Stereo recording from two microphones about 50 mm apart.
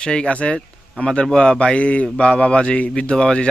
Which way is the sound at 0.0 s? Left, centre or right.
Centre.